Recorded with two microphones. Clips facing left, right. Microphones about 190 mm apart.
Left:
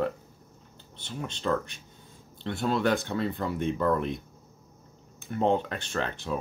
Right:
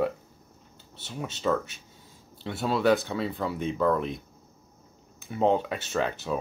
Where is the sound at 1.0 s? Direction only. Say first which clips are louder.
Right 2 dB; 5° right (ahead or behind).